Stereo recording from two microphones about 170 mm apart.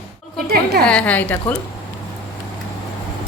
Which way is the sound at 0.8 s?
5° left (ahead or behind).